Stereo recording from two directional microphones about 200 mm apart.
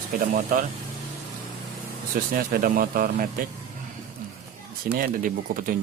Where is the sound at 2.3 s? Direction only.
45° right (ahead or behind).